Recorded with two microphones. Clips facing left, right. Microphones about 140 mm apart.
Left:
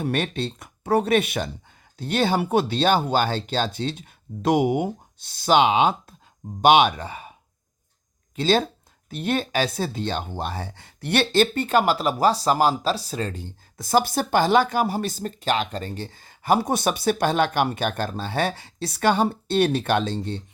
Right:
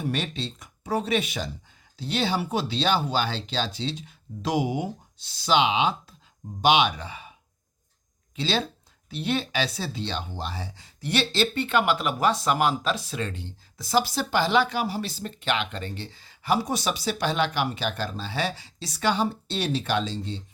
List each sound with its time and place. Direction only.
0.0 s speech: 55° left (ahead or behind)
8.4 s speech: 45° left (ahead or behind)